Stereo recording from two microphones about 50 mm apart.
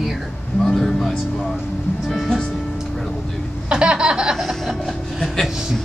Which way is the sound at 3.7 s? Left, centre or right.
Centre.